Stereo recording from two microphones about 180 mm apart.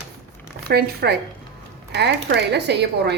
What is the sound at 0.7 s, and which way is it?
A woman's voice, 60° right (ahead or behind).